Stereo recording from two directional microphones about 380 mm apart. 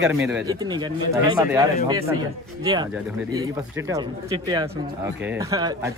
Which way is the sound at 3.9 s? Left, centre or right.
Centre.